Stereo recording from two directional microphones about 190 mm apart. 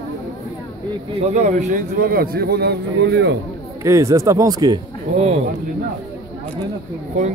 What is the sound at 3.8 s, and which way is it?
Speech, 15° right (ahead or behind).